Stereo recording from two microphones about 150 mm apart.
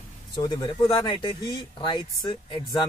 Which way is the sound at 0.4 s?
30° left (ahead or behind).